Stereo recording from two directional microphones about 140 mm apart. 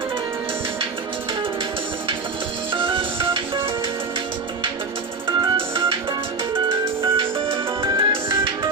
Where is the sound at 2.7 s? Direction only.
40° right (ahead or behind).